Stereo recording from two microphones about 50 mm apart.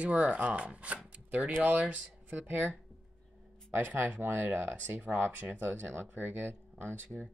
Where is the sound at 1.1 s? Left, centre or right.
Right.